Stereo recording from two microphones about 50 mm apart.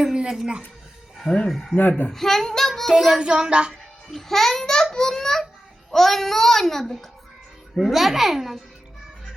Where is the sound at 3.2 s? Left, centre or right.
Centre.